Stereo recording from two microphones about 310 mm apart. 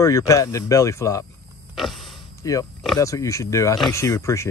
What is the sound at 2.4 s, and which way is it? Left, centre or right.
Speech, centre.